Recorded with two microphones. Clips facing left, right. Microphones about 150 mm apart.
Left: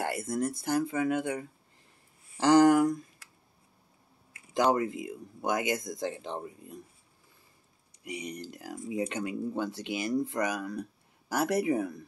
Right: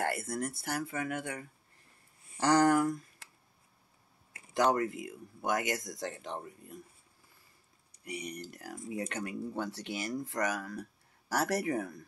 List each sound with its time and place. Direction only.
0.0 s speech: 15° left (ahead or behind)
2.4 s speech: 20° left (ahead or behind)
4.7 s speech: 20° left (ahead or behind)
8.0 s speech: 20° left (ahead or behind)